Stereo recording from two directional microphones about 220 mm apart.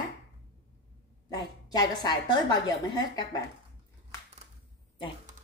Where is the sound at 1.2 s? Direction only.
15° left (ahead or behind).